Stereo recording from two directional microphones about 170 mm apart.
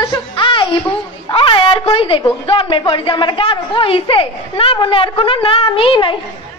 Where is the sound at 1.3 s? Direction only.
30° left (ahead or behind).